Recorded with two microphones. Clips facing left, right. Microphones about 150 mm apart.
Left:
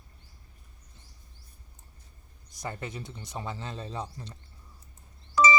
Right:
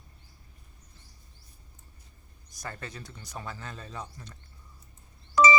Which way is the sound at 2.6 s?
20° left (ahead or behind).